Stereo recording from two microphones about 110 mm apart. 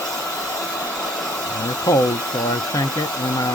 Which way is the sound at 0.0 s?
30° left (ahead or behind).